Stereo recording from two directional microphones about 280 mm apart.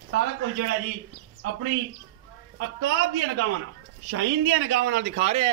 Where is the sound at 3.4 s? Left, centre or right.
Right.